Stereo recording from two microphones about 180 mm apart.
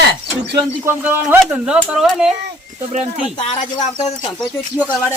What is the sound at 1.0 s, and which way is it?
Speech, 5° right (ahead or behind).